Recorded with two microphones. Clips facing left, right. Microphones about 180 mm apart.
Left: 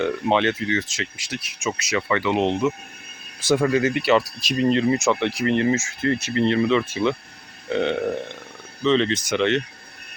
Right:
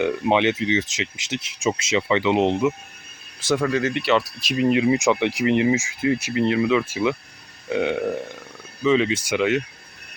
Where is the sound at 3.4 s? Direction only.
5° left (ahead or behind).